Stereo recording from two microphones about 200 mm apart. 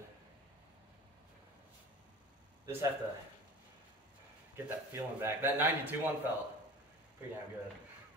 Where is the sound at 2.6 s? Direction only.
15° right (ahead or behind).